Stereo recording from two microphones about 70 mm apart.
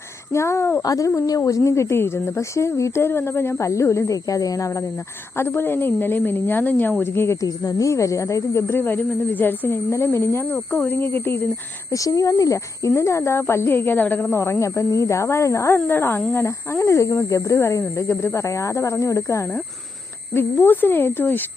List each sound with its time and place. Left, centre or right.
0.3 s speech: left
0.8 s speech: left
5.4 s speech: left
7.0 s speech: left
7.4 s speech: left
11.9 s speech: left
14.3 s speech: left
15.9 s speech: left
20.3 s speech: left